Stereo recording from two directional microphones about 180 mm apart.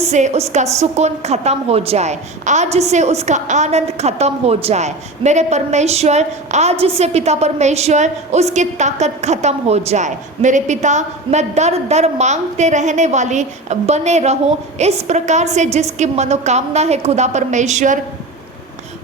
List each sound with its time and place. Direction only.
0.0 s a woman's voice: 40° right (ahead or behind)